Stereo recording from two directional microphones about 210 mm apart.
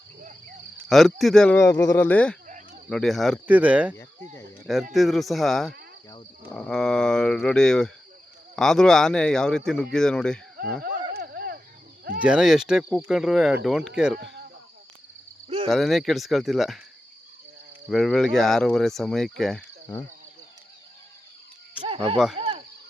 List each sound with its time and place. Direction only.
0.9 s speech: centre (ahead or behind)
2.5 s cricket: 35° right (ahead or behind)
2.9 s speech: centre (ahead or behind)
11.1 s dog: 50° right (ahead or behind)
12.2 s speech: 5° right (ahead or behind)
14.2 s cricket: 50° right (ahead or behind)
15.4 s cricket: 25° right (ahead or behind)
15.7 s speech: centre (ahead or behind)
17.8 s speech: centre (ahead or behind)
21.8 s insect: 25° right (ahead or behind)
22.4 s a sound: 30° right (ahead or behind)